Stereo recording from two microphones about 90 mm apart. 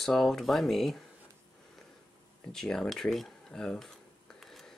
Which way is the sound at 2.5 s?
5° left (ahead or behind).